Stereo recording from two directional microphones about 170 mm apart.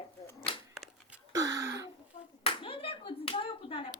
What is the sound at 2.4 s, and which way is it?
Speech, 30° left (ahead or behind).